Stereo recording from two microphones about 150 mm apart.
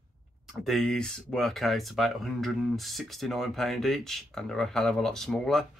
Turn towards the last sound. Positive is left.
turn(degrees=5)  # may be behind; listen again after turning